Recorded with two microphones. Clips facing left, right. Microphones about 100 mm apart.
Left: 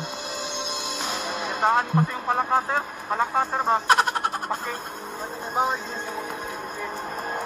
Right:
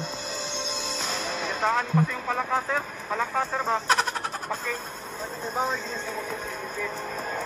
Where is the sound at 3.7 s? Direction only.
55° left (ahead or behind).